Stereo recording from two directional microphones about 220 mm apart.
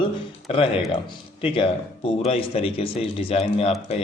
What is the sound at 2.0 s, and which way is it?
Speech, 25° left (ahead or behind).